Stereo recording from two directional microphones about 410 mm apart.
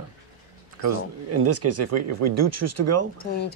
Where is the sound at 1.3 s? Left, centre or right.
Right.